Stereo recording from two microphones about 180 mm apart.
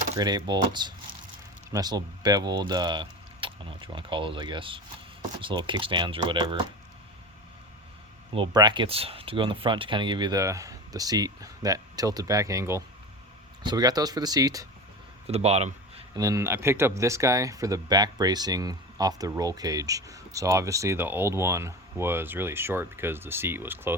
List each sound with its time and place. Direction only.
0.2 s speech: 20° right (ahead or behind)
8.4 s speech: 25° right (ahead or behind)
15.3 s speech: 35° right (ahead or behind)
16.1 s speech: 20° right (ahead or behind)